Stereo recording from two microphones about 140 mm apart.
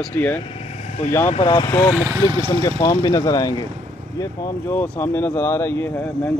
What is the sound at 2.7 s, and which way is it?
Speech, 30° left (ahead or behind).